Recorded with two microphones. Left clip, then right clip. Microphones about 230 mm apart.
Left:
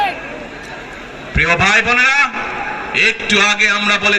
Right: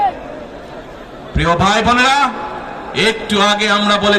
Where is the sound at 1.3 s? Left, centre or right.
Right.